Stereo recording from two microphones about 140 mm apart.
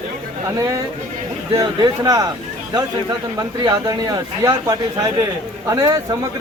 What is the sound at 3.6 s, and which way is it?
Speech, 30° right (ahead or behind).